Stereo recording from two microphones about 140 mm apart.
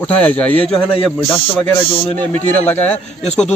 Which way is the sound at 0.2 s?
10° left (ahead or behind).